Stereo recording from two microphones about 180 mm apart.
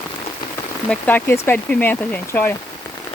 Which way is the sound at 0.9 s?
10° left (ahead or behind).